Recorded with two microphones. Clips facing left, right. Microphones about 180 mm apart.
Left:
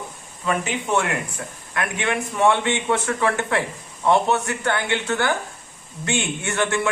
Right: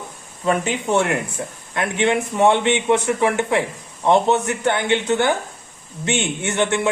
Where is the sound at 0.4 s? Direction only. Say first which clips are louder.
Right 4 dB; 30° right (ahead or behind).